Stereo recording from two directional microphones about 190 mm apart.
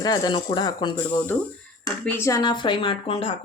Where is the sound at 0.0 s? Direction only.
25° left (ahead or behind).